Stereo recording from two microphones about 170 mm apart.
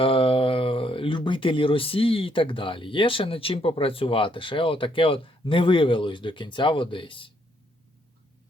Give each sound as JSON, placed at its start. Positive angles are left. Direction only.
{"t": 0.0, "sound": "speech", "side_deg": 30}